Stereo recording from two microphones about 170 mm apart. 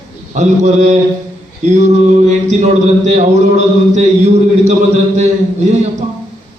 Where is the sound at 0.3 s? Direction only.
45° right (ahead or behind).